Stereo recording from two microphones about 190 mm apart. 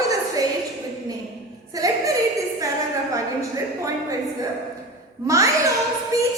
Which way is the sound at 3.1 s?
15° right (ahead or behind).